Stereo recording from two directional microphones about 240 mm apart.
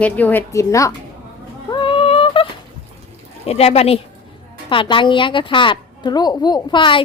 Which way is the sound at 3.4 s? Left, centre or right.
Left.